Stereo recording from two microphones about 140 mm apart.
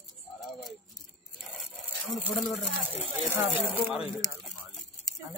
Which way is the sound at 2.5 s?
5° right (ahead or behind).